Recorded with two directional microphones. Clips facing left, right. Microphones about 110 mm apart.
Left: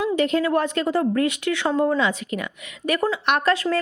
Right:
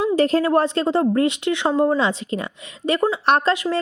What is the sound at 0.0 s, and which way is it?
A woman's voice, 35° right (ahead or behind).